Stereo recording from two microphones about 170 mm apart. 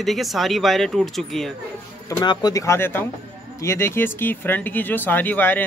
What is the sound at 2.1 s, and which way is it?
Speech, 25° left (ahead or behind).